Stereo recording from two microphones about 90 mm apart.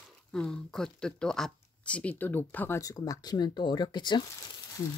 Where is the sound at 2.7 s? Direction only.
40° left (ahead or behind); by 4.2 s 55° left (ahead or behind).